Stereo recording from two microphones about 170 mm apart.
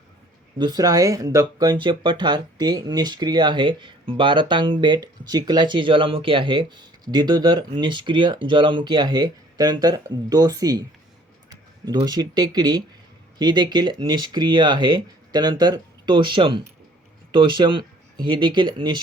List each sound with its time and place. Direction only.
0.6 s speech: 25° right (ahead or behind)
12.0 s speech: 25° right (ahead or behind)